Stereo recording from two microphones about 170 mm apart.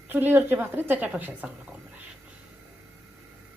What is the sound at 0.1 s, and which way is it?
A woman's voice, 10° right (ahead or behind).